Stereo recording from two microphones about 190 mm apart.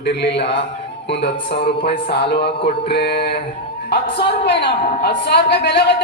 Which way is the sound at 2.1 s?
60° left (ahead or behind).